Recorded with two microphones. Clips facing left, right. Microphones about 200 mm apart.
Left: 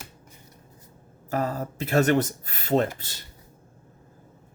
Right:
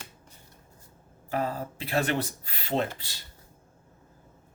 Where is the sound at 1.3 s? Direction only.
45° left (ahead or behind).